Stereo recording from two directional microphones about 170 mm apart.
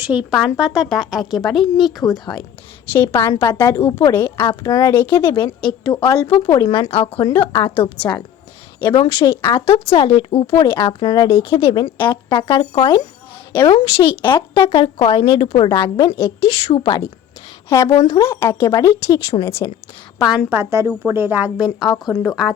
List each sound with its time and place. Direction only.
0.0 s a woman's voice: 10° right (ahead or behind)
2.9 s speech: 15° left (ahead or behind)
5.2 s a woman's voice: 30° left (ahead or behind)
9.6 s a woman's voice: 35° left (ahead or behind)
17.7 s speech: 15° left (ahead or behind)
20.2 s a woman's voice: centre (ahead or behind)
20.6 s a woman's voice: 15° right (ahead or behind)
21.8 s speech: 25° left (ahead or behind)